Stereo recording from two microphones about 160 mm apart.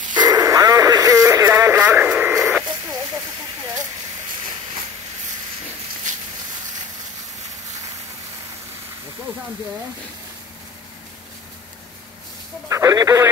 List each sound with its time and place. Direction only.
0.2 s radio: 25° right (ahead or behind)
2.6 s snake: 25° right (ahead or behind)
12.6 s telephone dialing: 20° right (ahead or behind)